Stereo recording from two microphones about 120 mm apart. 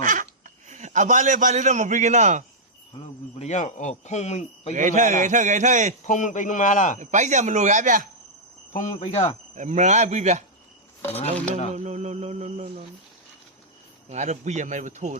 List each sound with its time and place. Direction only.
0.0 s a sound: 90° right
3.3 s speech: 80° left
4.7 s a man's voice: 90° right
6.1 s a man's voice: 90° left
7.0 s a man's voice: 90° right
8.7 s speech: 85° left; by 9.3 s 65° left (ahead or behind)
9.6 s mantra: 85° right
11.7 s mantra: 70° right (ahead or behind)
14.1 s speech: 80° right